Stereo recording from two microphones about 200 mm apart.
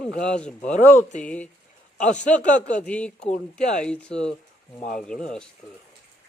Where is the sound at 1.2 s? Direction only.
5° left (ahead or behind).